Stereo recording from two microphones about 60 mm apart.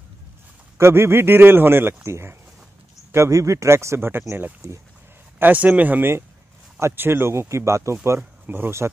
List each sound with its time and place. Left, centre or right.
0.7 s a man's voice: right
3.3 s a man's voice: right
5.4 s a man's voice: right